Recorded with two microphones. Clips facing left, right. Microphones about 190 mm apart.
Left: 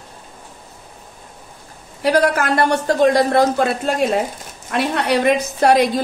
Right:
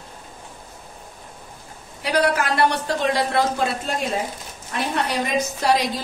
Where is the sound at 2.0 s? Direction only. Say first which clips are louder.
Left 5 dB; 45° left (ahead or behind).